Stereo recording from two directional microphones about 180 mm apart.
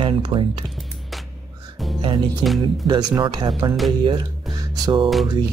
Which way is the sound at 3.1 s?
25° right (ahead or behind).